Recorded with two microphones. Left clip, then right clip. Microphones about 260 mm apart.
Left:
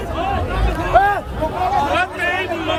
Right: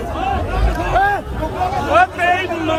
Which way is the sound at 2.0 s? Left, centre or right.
Centre.